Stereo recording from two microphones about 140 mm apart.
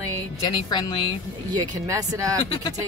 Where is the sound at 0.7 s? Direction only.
35° left (ahead or behind).